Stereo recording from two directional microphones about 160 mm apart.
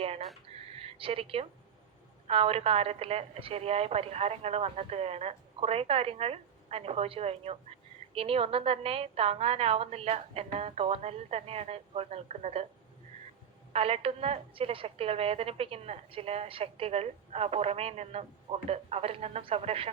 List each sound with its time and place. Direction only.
0.5 s a sound: 35° right (ahead or behind)
2.2 s a woman's voice: 35° right (ahead or behind)
13.7 s a woman's voice: 35° right (ahead or behind)